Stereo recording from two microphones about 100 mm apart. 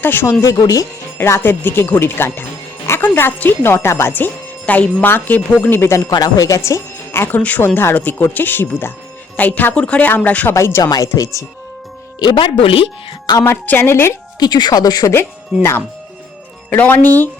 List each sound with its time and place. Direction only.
0.0 s speech: 20° left (ahead or behind)
10.5 s speech: 25° left (ahead or behind)
10.8 s speech: 40° left (ahead or behind)
12.2 s speech: 55° left (ahead or behind)
13.4 s speech: 20° left (ahead or behind)
14.3 s speech: 45° left (ahead or behind)
16.6 s speech: 15° left (ahead or behind)